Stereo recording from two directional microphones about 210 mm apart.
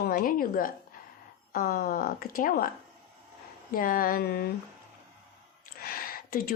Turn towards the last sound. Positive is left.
turn(degrees=45)  # may be behind; listen again after turning